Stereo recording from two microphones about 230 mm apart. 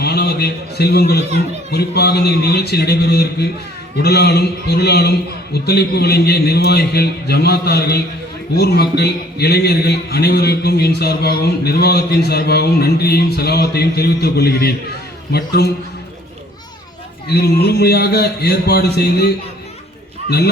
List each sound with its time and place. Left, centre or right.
0.0 s a man's voice: left
17.2 s a man's voice: left